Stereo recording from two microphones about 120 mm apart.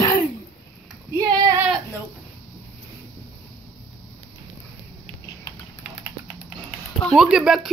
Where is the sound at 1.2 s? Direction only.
30° right (ahead or behind).